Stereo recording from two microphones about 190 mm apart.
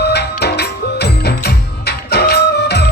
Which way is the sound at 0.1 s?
60° left (ahead or behind).